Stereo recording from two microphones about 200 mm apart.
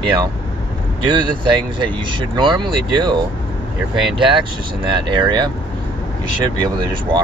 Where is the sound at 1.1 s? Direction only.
25° right (ahead or behind).